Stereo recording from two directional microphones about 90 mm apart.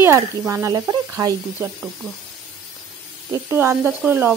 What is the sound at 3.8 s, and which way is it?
Speech, 20° right (ahead or behind).